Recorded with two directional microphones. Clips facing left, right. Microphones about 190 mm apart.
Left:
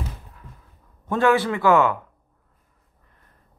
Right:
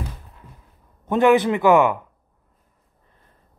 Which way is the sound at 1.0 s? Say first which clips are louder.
Right 4 dB; 20° right (ahead or behind).